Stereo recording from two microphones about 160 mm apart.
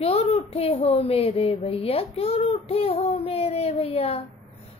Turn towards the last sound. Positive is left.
turn(degrees=40)  # may be behind; listen again after turning